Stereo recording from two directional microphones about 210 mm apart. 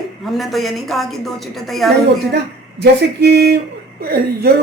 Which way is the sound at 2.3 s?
50° right (ahead or behind).